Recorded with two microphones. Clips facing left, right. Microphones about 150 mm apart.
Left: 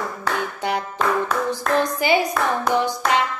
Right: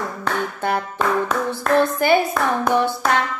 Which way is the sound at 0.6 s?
15° left (ahead or behind).